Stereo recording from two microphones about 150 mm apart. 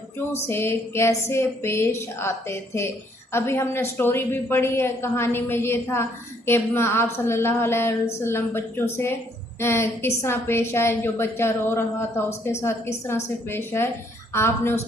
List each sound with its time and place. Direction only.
0.4 s a woman's voice: 15° left (ahead or behind)